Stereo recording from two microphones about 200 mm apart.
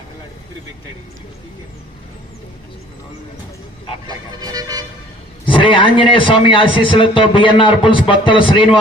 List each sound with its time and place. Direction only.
4.0 s speech: 20° right (ahead or behind)
5.5 s a man's voice: 25° left (ahead or behind)